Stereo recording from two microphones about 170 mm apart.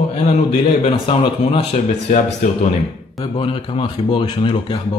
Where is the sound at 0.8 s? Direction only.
30° left (ahead or behind).